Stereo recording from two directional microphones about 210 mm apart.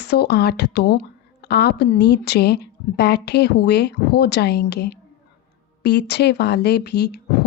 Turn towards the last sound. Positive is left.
turn(degrees=50)  # may be behind; listen again after turning